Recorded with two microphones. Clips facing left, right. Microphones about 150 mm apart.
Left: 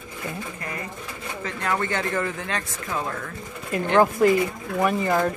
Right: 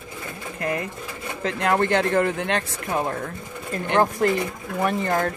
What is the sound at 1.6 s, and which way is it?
Speech, 70° right (ahead or behind).